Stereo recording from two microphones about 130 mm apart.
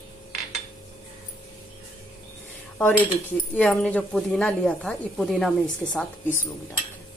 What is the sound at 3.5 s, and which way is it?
A woman's voice, 10° left (ahead or behind).